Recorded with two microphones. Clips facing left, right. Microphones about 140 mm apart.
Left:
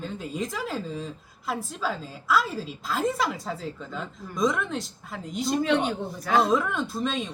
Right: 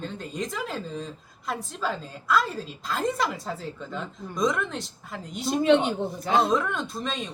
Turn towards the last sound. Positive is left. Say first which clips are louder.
# left 3 dB
turn(degrees=0)  # may be behind; listen again after turning